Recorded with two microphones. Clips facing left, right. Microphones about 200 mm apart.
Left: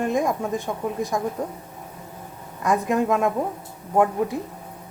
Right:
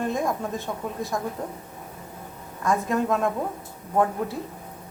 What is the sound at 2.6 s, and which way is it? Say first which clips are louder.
A woman's voice: left 3 dB; 15° left (ahead or behind).